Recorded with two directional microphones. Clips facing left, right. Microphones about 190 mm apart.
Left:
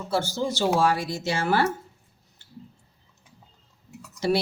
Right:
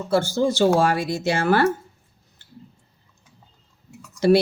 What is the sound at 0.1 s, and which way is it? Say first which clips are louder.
Speech: right 6 dB; 50° right (ahead or behind).